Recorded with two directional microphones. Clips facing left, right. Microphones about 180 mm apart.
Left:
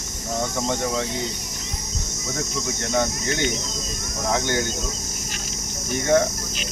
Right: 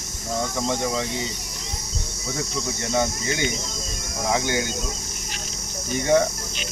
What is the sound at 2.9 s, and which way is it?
Speech, 10° right (ahead or behind).